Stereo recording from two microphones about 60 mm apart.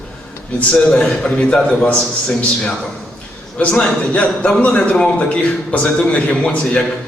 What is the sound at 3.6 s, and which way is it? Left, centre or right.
A man's voice, left.